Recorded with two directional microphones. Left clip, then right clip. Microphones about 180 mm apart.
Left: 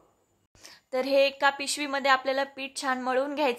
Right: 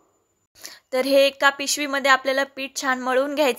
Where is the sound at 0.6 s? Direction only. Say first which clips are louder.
Right 6 dB; 20° right (ahead or behind).